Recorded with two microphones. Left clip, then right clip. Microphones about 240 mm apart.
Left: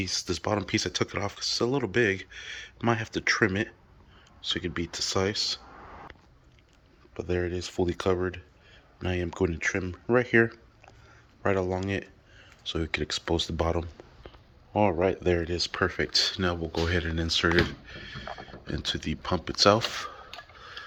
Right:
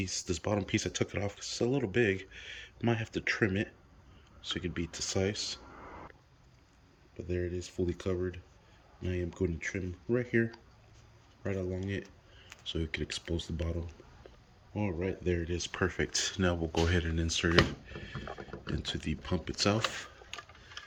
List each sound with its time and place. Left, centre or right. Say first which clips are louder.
0.0 s speech: left 6 dB; centre
7.2 s speech: left 7 dB; centre